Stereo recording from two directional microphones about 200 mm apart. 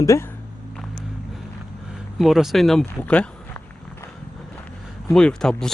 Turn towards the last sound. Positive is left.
turn(degrees=5)  # may be behind; listen again after turning